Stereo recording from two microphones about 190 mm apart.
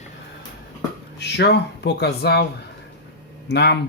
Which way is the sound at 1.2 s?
60° left (ahead or behind).